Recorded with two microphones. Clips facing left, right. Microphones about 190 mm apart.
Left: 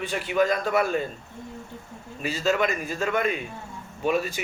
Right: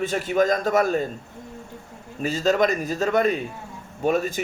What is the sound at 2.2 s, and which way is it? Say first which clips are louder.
A man's voice: right 4 dB; 45° right (ahead or behind).